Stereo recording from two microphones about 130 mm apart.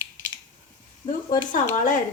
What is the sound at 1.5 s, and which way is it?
Speech, 90° left.